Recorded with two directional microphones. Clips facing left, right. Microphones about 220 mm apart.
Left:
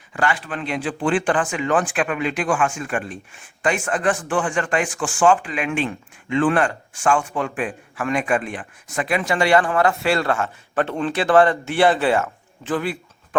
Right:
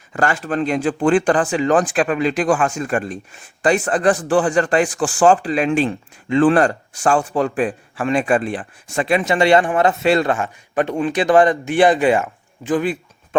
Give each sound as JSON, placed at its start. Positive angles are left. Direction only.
{"t": 0.1, "sound": "speech", "side_deg": -45}